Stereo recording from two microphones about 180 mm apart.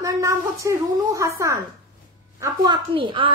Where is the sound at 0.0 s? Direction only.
15° right (ahead or behind).